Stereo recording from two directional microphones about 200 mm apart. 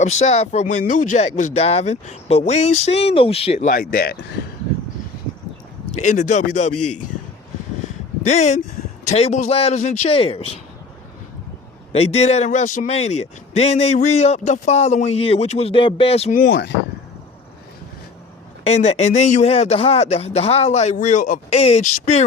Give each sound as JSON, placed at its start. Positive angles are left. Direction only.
{"t": 0.0, "sound": "speech", "side_deg": 35}
{"t": 5.9, "sound": "speech", "side_deg": 40}
{"t": 8.3, "sound": "speech", "side_deg": 35}
{"t": 11.9, "sound": "speech", "side_deg": 30}
{"t": 16.3, "sound": "speech", "side_deg": 55}
{"t": 18.6, "sound": "speech", "side_deg": 35}